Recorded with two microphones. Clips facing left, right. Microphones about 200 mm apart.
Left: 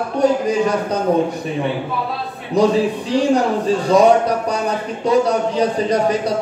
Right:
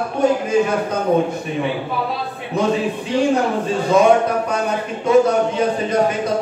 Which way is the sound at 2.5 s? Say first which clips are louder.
Left 4 dB; 35° left (ahead or behind).